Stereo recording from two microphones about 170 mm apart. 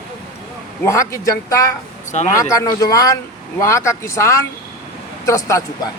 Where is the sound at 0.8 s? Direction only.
15° left (ahead or behind).